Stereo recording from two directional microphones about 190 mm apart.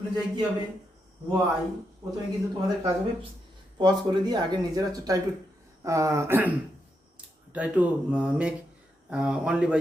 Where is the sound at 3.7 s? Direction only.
20° right (ahead or behind).